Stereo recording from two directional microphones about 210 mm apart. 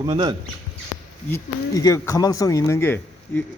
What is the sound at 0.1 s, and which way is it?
Speech, 20° right (ahead or behind).